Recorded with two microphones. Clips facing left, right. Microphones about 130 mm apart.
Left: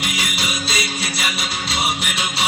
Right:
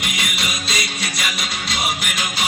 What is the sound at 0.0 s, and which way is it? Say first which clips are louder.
Music: left 1 dB; 30° left (ahead or behind).